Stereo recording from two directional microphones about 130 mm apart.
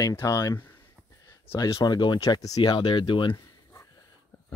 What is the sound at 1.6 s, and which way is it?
Speech, 25° left (ahead or behind).